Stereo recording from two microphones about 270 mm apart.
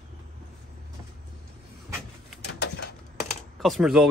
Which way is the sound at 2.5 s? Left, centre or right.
Left.